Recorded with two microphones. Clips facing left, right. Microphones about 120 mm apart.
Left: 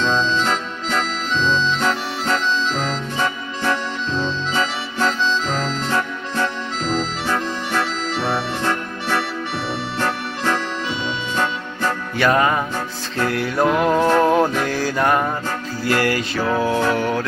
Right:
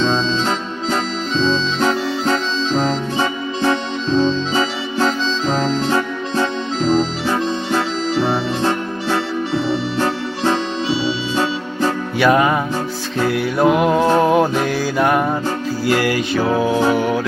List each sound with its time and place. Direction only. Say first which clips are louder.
0.0 s music: right 2 dB; 20° right (ahead or behind)
5.5 s music: right 5 dB; 20° right (ahead or behind)
12.2 s music: right 3 dB; 10° right (ahead or behind)